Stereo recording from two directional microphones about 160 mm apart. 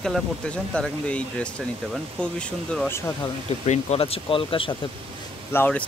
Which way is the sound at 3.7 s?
40° left (ahead or behind).